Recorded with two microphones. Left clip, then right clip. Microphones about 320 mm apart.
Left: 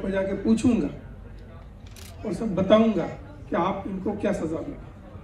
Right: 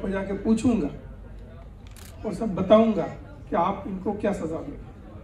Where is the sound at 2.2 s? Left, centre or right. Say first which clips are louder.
Right 1 dB; right.